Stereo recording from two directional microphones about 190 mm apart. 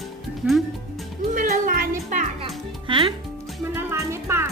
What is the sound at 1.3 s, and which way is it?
Music, 45° right (ahead or behind).